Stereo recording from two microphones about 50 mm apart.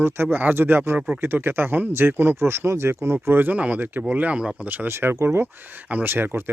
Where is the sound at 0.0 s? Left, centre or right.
Right.